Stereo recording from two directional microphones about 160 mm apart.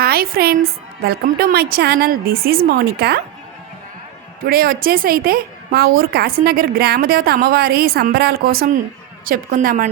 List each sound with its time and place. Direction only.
0.0 s a woman's voice: 70° right (ahead or behind)
4.4 s a woman's voice: 70° right (ahead or behind)